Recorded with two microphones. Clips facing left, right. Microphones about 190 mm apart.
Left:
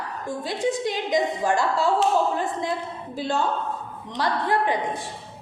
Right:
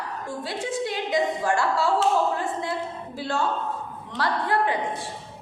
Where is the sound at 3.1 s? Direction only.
15° left (ahead or behind).